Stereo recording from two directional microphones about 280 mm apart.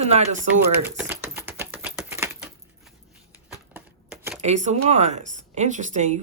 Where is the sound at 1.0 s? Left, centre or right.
Centre.